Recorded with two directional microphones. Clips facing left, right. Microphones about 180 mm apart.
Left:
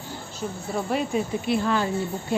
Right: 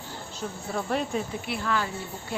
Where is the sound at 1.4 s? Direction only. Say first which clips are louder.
Left 6 dB; 25° left (ahead or behind).